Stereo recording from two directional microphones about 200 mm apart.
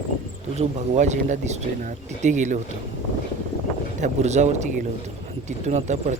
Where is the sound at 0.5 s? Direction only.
35° right (ahead or behind).